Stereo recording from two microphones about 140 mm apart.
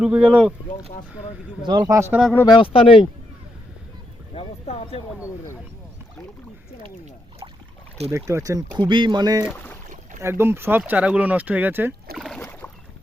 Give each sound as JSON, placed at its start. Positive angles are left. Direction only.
{"t": 0.0, "sound": "speech", "side_deg": -5}
{"t": 1.6, "sound": "speech", "side_deg": -30}
{"t": 2.0, "sound": "speech", "side_deg": -15}
{"t": 2.5, "sound": "speech", "side_deg": 40}
{"t": 4.4, "sound": "a sound", "side_deg": 45}
{"t": 8.1, "sound": "speech", "side_deg": -20}
{"t": 8.8, "sound": "speech", "side_deg": -35}
{"t": 12.1, "sound": "boat", "side_deg": 0}